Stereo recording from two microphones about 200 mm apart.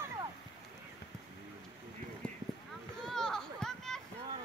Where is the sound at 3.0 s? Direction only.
Centre (ahead or behind).